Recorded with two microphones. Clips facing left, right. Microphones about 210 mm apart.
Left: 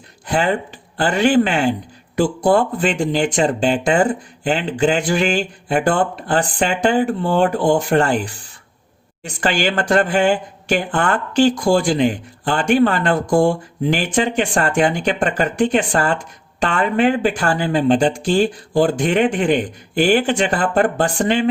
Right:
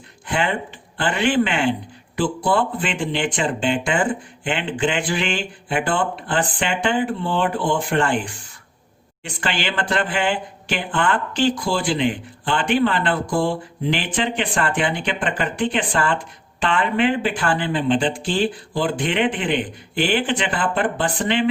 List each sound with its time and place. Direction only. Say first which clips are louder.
0.3 s speech: left 4 dB; 40° left (ahead or behind)